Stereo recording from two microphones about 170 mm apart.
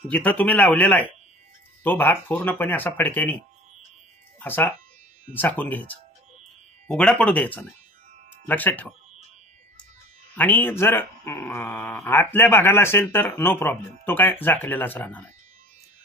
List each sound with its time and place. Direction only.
0.1 s speech: 10° left (ahead or behind)
4.4 s speech: 10° left (ahead or behind)
10.3 s speech: 10° left (ahead or behind)